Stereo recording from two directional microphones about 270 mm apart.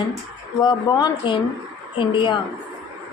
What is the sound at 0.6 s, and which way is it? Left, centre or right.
A woman's voice, centre.